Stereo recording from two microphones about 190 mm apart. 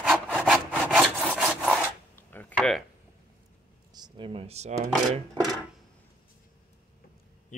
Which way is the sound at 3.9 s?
25° right (ahead or behind).